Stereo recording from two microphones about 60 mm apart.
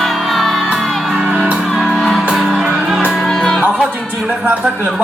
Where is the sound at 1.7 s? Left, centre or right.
Centre.